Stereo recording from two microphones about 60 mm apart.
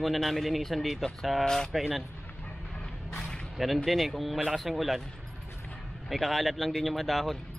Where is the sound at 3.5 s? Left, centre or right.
Centre.